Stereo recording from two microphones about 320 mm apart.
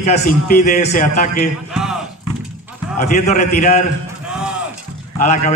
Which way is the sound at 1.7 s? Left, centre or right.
Centre.